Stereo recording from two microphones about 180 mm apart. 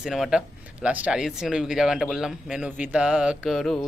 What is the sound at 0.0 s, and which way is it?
Speech, centre (ahead or behind).